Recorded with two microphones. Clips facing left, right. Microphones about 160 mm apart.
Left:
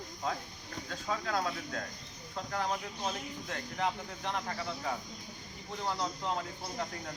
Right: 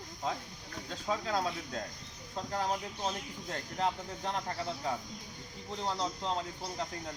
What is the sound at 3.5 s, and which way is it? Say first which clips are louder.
Speech: right 1 dB; 30° right (ahead or behind).